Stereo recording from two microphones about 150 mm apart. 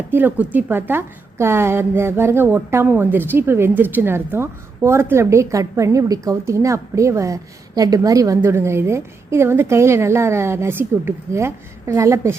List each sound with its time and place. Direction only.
0.1 s a woman's voice: 15° right (ahead or behind)